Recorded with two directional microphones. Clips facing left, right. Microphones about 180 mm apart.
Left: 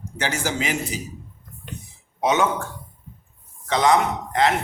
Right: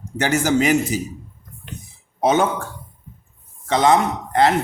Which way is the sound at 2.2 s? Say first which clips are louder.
Right 3 dB; 35° right (ahead or behind).